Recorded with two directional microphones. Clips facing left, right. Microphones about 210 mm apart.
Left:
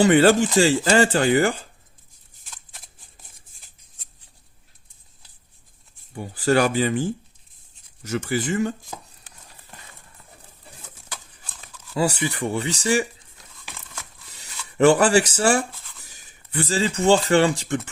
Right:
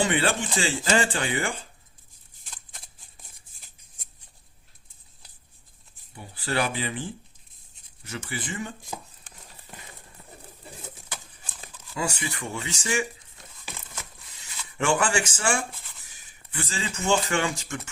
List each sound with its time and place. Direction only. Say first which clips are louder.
0.0 s speech: left 10 dB; 40° left (ahead or behind)
6.1 s speech: left 9 dB; 45° left (ahead or behind)
11.9 s speech: left 8 dB; 35° left (ahead or behind)
14.3 s speech: left 10 dB; 35° left (ahead or behind)